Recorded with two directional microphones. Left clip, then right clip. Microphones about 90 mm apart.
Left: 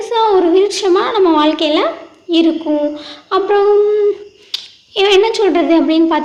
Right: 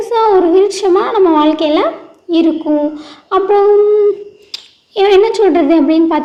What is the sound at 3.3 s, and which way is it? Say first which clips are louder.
Humming: right 2 dB; 30° right (ahead or behind).